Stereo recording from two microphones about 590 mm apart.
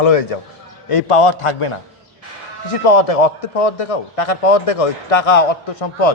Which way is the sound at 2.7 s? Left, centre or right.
Left.